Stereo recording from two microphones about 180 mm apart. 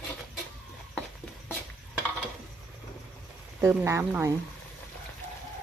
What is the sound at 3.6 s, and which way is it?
Speech, 15° right (ahead or behind).